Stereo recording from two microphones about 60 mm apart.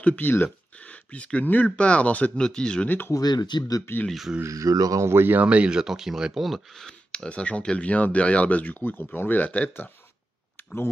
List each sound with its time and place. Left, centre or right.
0.0 s speech: left
0.7 s speech: left
3.1 s speech: left
4.4 s speech: right
5.0 s speech: right
5.4 s speech: right; by 9.8 s left